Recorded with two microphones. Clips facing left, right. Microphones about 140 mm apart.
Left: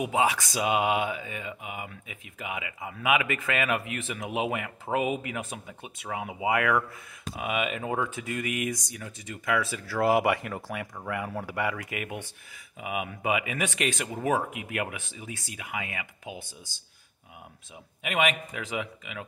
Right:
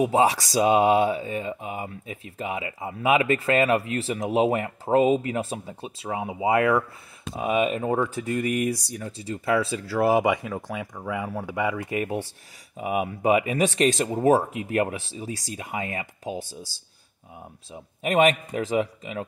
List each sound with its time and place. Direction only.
0.0 s speech: 35° right (ahead or behind)
10.1 s speech: centre (ahead or behind)
11.8 s speech: 30° right (ahead or behind)
18.0 s speech: 40° right (ahead or behind)